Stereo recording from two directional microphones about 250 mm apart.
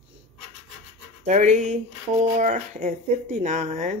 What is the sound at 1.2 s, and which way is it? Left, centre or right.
Speech, right.